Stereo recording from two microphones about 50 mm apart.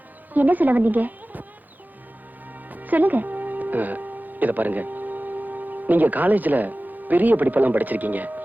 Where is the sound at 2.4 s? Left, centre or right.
Right.